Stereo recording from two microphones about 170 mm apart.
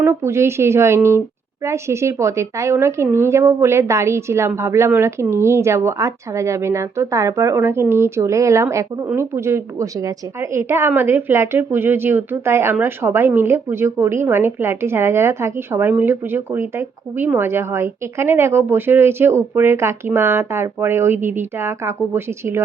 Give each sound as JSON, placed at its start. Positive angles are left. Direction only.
{"t": 0.0, "sound": "a woman's voice", "side_deg": -15}